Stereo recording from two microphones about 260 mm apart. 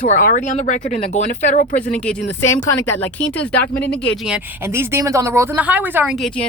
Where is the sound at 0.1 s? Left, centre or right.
Left.